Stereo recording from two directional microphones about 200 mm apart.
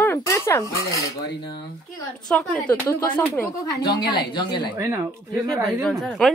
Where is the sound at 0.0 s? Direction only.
10° left (ahead or behind).